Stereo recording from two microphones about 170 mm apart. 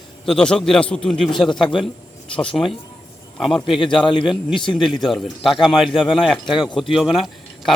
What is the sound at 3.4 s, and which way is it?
Speech, centre (ahead or behind).